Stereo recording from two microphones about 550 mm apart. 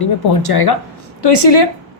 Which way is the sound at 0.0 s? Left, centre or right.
Left.